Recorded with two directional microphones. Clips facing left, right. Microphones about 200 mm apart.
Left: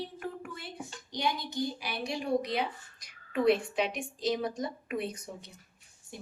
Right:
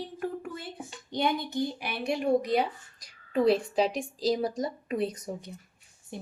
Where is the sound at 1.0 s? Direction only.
55° right (ahead or behind).